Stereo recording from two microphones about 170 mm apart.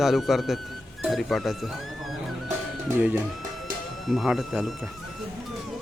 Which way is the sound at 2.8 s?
10° right (ahead or behind).